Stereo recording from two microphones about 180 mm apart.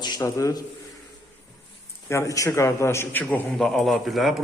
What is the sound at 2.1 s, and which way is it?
A man's voice, 15° left (ahead or behind).